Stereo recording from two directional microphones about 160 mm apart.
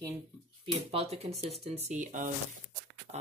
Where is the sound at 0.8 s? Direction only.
40° right (ahead or behind).